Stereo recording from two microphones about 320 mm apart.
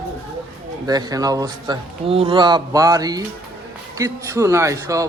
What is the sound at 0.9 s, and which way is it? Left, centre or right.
A man's voice, centre.